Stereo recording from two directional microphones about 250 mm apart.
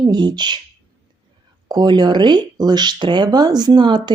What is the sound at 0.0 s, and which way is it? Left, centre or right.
Speech, centre.